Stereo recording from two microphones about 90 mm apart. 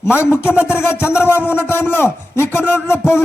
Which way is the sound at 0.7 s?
25° left (ahead or behind).